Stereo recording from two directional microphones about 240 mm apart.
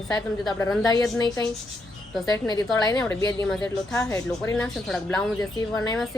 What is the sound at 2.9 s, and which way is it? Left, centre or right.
A woman's voice, centre.